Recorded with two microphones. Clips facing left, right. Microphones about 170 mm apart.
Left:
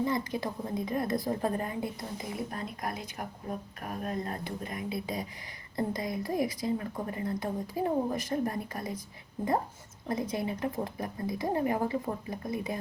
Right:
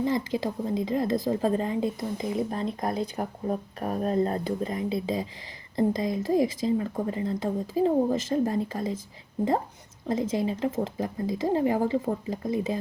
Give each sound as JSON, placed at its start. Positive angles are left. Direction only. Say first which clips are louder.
{"t": 0.0, "sound": "a woman's voice", "louder": "right 4 dB", "side_deg": -25}
{"t": 10.1, "sound": "a woman's voice", "louder": "right 5 dB", "side_deg": -25}